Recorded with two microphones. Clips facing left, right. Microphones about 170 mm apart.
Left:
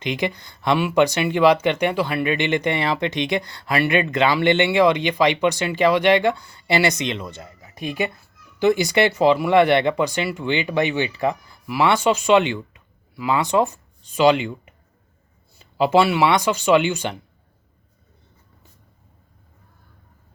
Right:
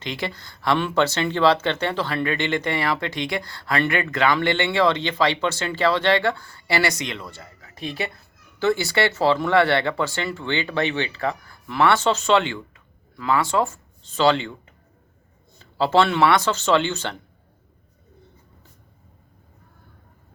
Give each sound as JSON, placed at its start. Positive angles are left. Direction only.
{"t": 0.0, "sound": "speech", "side_deg": 20}